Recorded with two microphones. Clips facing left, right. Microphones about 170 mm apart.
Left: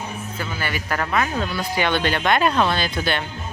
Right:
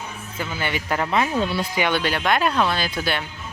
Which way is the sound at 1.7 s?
10° right (ahead or behind).